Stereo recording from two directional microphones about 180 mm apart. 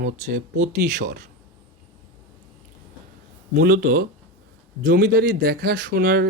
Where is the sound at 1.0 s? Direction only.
70° right (ahead or behind).